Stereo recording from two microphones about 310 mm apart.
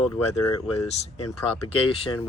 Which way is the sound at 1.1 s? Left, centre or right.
Left.